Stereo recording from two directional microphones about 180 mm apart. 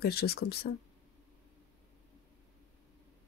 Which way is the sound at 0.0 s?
60° left (ahead or behind).